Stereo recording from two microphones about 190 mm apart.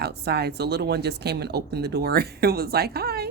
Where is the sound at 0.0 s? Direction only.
60° right (ahead or behind).